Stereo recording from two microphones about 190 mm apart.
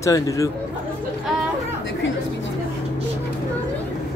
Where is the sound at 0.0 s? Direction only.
15° left (ahead or behind).